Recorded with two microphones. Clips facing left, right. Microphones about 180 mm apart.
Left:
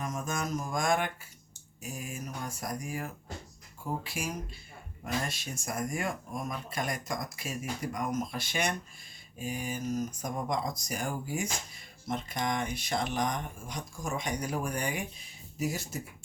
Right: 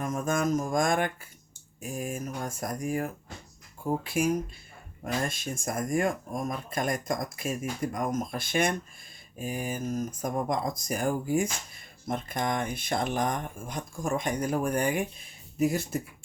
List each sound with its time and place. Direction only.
0.0 s speech: 55° right (ahead or behind)